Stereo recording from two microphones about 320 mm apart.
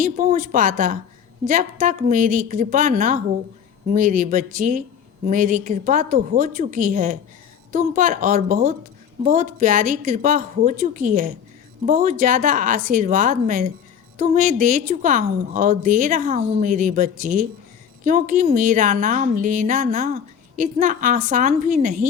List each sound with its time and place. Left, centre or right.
0.0 s a woman's voice: right